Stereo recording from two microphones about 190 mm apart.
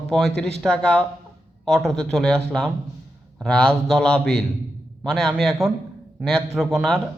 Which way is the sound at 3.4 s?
5° left (ahead or behind).